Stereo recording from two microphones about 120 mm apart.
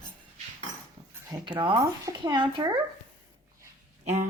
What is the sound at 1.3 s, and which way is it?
Speech, 40° right (ahead or behind).